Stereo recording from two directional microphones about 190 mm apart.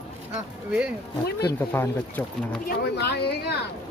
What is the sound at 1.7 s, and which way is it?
Speech, 10° left (ahead or behind).